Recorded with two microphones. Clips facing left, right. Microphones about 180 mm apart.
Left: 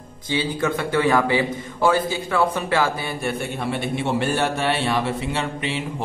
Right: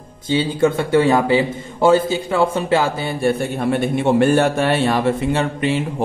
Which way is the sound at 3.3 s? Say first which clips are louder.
Right 8 dB; 50° right (ahead or behind).